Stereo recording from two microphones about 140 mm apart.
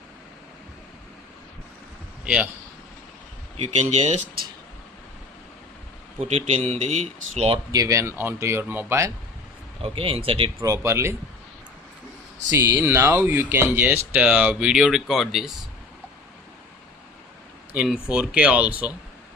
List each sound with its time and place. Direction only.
2.2 s speech: 5° right (ahead or behind)
3.8 s speech: 50° right (ahead or behind)
6.1 s speech: 50° right (ahead or behind)
7.7 s speech: 25° right (ahead or behind)
9.8 s speech: 40° right (ahead or behind)
10.6 s speech: 20° right (ahead or behind)
12.5 s speech: 20° right (ahead or behind); by 15.5 s centre (ahead or behind)
17.7 s speech: 5° right (ahead or behind)